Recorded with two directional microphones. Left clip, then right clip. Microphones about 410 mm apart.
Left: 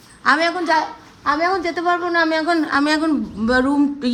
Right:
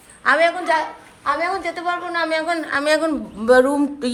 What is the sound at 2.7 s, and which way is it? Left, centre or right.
Speech, centre.